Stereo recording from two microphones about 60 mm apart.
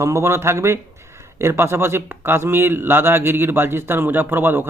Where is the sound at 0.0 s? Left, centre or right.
Right.